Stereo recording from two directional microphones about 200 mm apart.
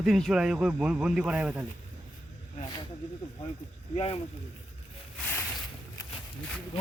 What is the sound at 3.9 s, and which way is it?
Speech, 30° left (ahead or behind).